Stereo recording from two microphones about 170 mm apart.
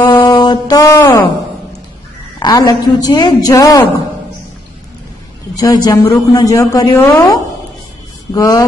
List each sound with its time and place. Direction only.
0.1 s music: 25° left (ahead or behind)
2.4 s a man's voice: 25° left (ahead or behind)
5.6 s a man's voice: 25° left (ahead or behind)
8.4 s a man's voice: 20° left (ahead or behind)